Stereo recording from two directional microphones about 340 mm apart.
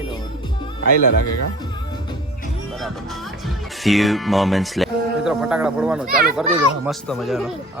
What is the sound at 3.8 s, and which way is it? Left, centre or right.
Speech, centre.